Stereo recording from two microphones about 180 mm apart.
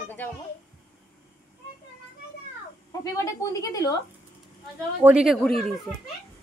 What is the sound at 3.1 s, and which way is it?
Speech, 20° left (ahead or behind).